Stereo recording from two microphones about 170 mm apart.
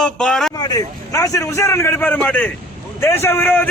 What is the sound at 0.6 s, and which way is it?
A man's voice, 20° left (ahead or behind).